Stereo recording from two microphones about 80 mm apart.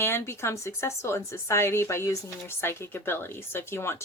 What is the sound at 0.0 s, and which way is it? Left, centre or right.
Speech, left.